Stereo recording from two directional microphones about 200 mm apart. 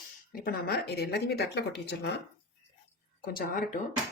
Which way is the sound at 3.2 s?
45° left (ahead or behind).